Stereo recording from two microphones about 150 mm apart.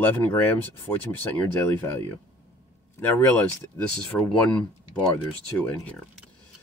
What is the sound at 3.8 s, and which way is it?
Speech, 20° left (ahead or behind).